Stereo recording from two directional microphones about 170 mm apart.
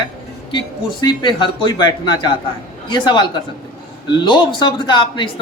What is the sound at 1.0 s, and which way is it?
A man's voice, 25° left (ahead or behind).